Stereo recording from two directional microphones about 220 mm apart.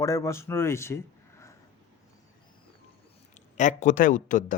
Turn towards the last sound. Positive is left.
turn(degrees=35)  # may be behind; listen again after turning